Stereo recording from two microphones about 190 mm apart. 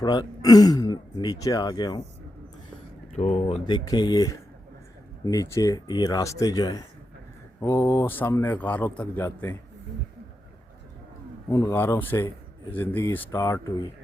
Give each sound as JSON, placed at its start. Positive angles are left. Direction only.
{"t": 0.0, "sound": "speech", "side_deg": 20}
{"t": 3.2, "sound": "a man's voice", "side_deg": 35}
{"t": 11.5, "sound": "a man's voice", "side_deg": 15}